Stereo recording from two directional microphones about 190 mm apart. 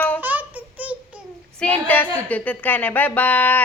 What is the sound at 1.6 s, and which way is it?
A woman's voice, 5° left (ahead or behind).